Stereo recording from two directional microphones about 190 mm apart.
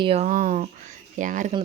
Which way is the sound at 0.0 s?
35° right (ahead or behind).